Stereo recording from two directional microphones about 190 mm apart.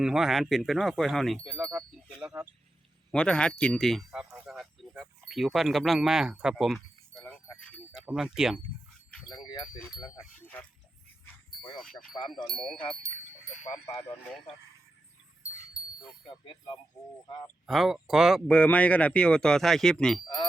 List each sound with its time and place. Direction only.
0.0 s speech: centre (ahead or behind)
3.1 s speech: 5° left (ahead or behind)
7.1 s keys jangling: centre (ahead or behind)
7.9 s speech: 5° right (ahead or behind)
9.3 s speech: 20° left (ahead or behind)
10.4 s speech: 10° left (ahead or behind)
11.8 s speech: 5° left (ahead or behind)
17.4 s speech: centre (ahead or behind)